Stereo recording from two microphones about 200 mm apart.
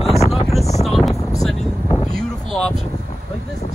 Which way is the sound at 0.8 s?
Centre (ahead or behind).